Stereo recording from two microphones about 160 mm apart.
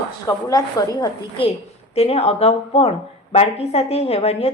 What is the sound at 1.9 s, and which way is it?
A woman's voice, 40° left (ahead or behind).